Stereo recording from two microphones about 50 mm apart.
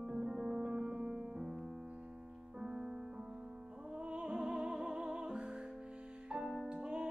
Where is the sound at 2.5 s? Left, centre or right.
Centre.